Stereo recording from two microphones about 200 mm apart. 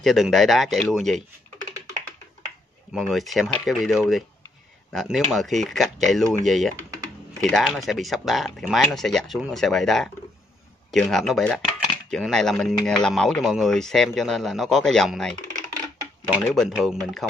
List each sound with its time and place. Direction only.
0.0 s speech: centre (ahead or behind)
2.9 s speech: centre (ahead or behind)
6.9 s typing: 15° right (ahead or behind)
7.5 s speech: centre (ahead or behind)
16.4 s speech: centre (ahead or behind)